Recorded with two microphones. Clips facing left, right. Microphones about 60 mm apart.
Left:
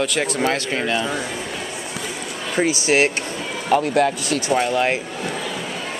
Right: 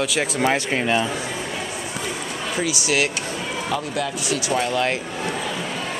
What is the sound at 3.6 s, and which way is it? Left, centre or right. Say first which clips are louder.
Speech: left 10 dB; left.